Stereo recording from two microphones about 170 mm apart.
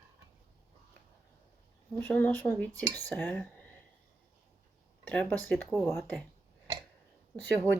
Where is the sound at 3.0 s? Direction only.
10° left (ahead or behind).